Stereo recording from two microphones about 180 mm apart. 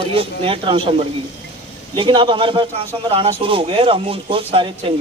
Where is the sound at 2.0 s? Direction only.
30° right (ahead or behind).